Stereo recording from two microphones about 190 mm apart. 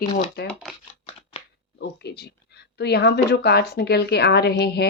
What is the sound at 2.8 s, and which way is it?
A woman's voice, 60° left (ahead or behind).